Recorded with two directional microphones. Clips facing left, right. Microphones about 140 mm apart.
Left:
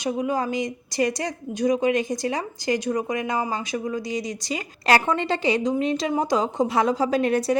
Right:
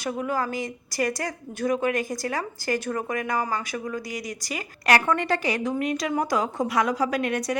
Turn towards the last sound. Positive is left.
turn(degrees=30)  # may be behind; listen again after turning